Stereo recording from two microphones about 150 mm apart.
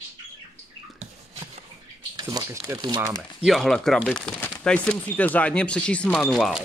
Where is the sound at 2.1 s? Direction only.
25° right (ahead or behind).